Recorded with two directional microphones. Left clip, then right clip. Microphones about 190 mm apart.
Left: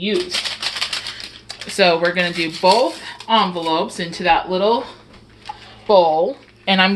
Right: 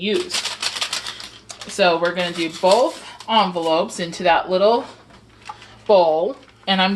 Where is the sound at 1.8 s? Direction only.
20° left (ahead or behind).